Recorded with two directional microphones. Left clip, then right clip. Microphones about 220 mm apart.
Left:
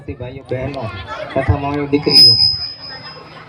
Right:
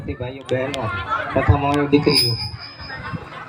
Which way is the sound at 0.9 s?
55° left (ahead or behind).